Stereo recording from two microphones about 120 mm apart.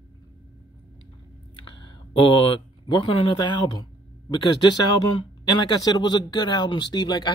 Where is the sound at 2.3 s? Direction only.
45° left (ahead or behind).